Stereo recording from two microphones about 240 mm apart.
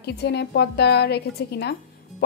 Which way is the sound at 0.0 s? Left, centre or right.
Left.